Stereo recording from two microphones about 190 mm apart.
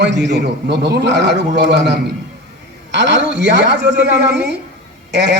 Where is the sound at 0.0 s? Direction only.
65° right (ahead or behind).